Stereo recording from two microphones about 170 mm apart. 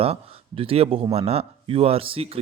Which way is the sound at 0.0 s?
35° right (ahead or behind).